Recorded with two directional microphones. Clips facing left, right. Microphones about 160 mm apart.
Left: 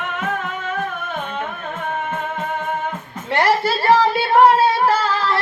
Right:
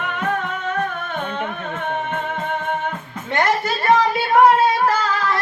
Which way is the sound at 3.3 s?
30° left (ahead or behind).